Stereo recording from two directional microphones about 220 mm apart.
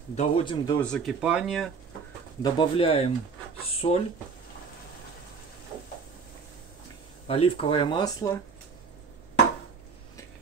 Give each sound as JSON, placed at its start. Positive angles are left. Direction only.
{"t": 0.1, "sound": "speech", "side_deg": 25}
{"t": 0.7, "sound": "speech", "side_deg": 5}
{"t": 2.4, "sound": "speech", "side_deg": 20}
{"t": 7.2, "sound": "speech", "side_deg": 25}